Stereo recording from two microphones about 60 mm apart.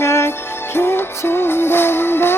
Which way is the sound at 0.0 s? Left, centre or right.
Left.